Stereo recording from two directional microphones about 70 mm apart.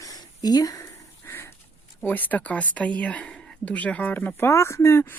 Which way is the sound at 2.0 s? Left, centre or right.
Left.